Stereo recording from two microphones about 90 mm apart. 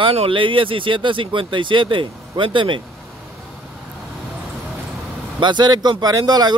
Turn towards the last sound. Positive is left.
turn(degrees=-45)  # may be behind; listen again after turning